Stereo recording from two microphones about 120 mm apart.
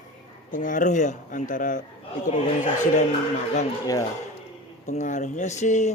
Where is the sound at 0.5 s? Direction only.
90° left.